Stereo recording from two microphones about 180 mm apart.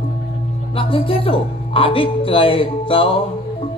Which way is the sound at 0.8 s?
30° left (ahead or behind).